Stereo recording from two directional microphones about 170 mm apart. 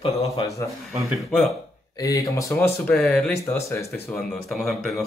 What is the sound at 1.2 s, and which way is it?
Speech, 5° left (ahead or behind).